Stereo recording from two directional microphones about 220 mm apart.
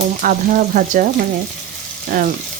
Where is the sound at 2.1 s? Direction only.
40° right (ahead or behind).